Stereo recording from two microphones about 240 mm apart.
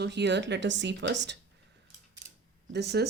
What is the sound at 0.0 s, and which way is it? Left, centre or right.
Speech, right.